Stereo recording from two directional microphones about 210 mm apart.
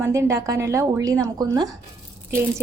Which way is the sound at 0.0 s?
15° right (ahead or behind).